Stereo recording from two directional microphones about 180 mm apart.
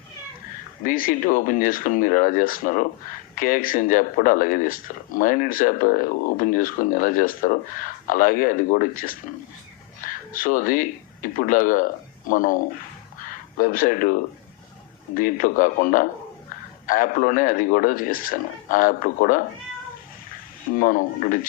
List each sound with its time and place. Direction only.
0.9 s speech: 50° left (ahead or behind)
20.7 s speech: 50° left (ahead or behind)